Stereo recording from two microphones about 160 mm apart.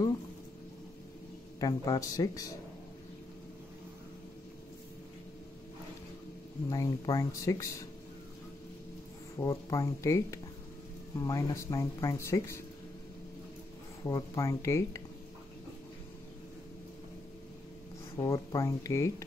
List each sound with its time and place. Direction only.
1.6 s speech: 25° left (ahead or behind)
6.7 s speech: 20° left (ahead or behind)
9.4 s speech: 20° left (ahead or behind)
14.0 s speech: 20° left (ahead or behind)
18.2 s speech: 20° left (ahead or behind)